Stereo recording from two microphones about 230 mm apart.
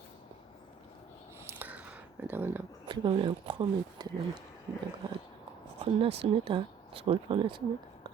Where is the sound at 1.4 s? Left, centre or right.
Centre.